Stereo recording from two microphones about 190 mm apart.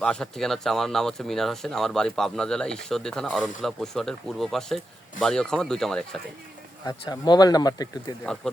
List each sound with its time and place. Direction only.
0.0 s speech: 5° left (ahead or behind)
6.8 s speech: 20° left (ahead or behind)